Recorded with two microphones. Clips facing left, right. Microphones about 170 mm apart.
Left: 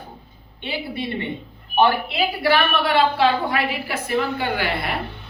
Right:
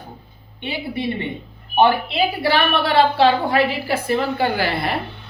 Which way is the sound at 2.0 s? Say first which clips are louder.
Right 1 dB; 25° right (ahead or behind).